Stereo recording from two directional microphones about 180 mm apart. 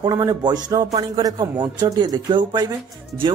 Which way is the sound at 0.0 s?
20° right (ahead or behind).